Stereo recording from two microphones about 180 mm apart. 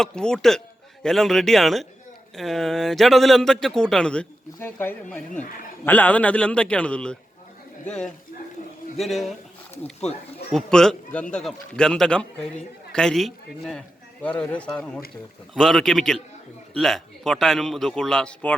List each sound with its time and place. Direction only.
0.0 s a man's voice: 5° left (ahead or behind)
10.5 s a man's voice: 5° left (ahead or behind)